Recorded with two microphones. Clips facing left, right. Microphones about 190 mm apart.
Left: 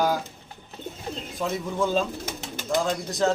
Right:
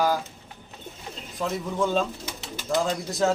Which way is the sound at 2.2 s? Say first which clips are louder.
Left 2 dB; 45° left (ahead or behind).